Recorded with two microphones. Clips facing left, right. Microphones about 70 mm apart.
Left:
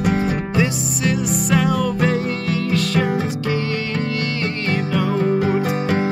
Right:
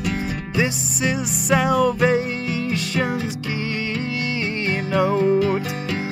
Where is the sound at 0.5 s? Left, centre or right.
Centre.